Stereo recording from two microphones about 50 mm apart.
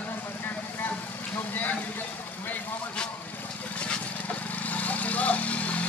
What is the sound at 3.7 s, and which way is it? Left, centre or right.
Vehicle, left.